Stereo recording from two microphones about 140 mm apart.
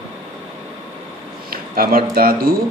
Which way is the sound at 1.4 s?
90° right.